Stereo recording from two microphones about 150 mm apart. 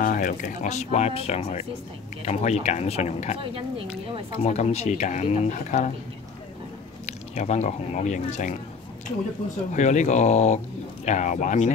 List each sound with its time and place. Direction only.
0.0 s speech: 65° left (ahead or behind); by 3.3 s 50° left (ahead or behind)
3.5 s speech: 35° right (ahead or behind)
4.4 s speech: 50° left (ahead or behind)
7.1 s speech: 50° left (ahead or behind)
9.8 s speech: 50° left (ahead or behind)